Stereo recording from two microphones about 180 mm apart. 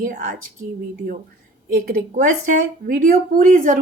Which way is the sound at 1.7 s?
55° right (ahead or behind).